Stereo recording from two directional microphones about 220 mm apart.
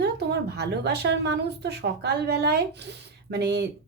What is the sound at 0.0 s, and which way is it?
A woman's voice, 50° right (ahead or behind).